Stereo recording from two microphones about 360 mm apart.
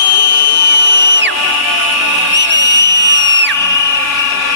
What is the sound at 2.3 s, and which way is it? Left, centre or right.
Whistle, right.